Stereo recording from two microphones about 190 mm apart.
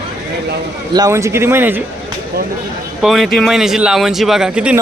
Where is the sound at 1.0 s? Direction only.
15° right (ahead or behind).